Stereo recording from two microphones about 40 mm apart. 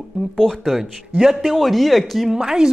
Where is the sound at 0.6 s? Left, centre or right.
Centre.